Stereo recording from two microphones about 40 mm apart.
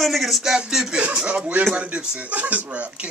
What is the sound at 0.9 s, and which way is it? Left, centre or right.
Speech, right.